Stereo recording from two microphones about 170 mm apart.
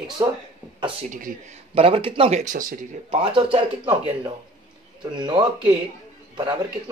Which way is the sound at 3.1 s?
35° right (ahead or behind).